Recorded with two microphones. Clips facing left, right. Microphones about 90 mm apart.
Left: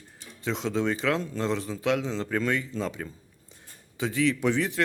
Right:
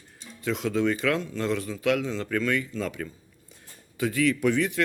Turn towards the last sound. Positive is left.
turn(degrees=30)  # may be behind; listen again after turning